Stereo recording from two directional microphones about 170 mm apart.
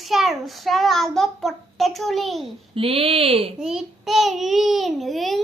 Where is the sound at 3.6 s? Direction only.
5° right (ahead or behind).